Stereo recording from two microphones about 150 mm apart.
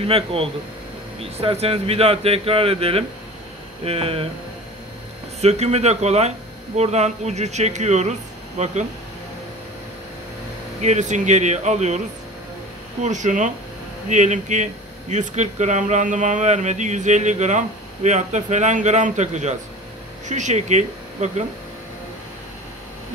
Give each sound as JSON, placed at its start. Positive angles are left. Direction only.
{"t": 0.0, "sound": "speech", "side_deg": -40}
{"t": 5.4, "sound": "speech", "side_deg": -45}
{"t": 10.8, "sound": "speech", "side_deg": -50}
{"t": 13.0, "sound": "speech", "side_deg": -55}